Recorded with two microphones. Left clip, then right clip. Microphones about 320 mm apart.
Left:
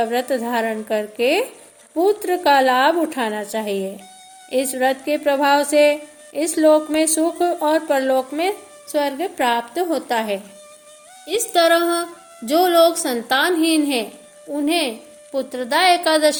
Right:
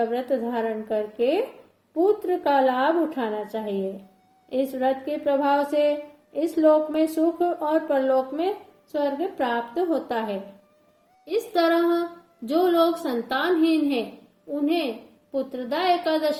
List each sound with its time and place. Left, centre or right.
0.1 s a woman's voice: left